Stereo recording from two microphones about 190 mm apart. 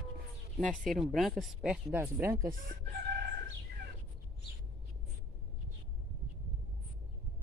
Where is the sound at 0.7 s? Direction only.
Centre (ahead or behind).